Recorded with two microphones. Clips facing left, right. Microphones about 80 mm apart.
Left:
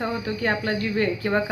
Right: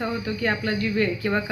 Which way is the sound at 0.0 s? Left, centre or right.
Left.